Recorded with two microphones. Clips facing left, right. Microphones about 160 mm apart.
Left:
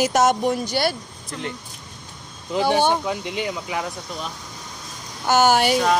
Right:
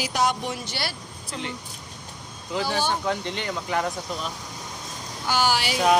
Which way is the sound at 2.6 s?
60° left (ahead or behind).